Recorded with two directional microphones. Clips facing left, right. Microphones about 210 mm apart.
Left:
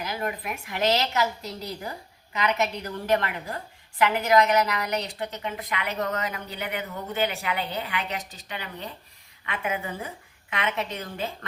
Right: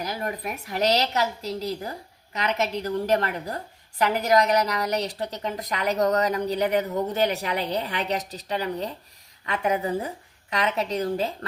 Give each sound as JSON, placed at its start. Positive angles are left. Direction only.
{"t": 0.0, "sound": "a woman's voice", "side_deg": -35}